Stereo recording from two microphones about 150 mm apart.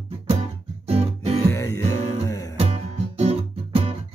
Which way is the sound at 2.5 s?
45° right (ahead or behind).